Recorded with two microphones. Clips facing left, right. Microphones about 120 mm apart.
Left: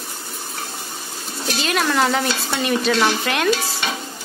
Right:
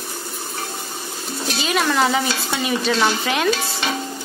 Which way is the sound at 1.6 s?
Centre (ahead or behind).